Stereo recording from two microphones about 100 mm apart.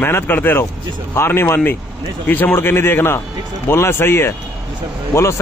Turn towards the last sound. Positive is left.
turn(degrees=30)  # may be behind; listen again after turning